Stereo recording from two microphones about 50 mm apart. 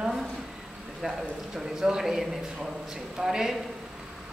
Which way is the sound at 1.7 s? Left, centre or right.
Centre.